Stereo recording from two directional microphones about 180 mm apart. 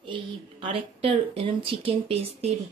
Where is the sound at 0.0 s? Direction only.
30° right (ahead or behind).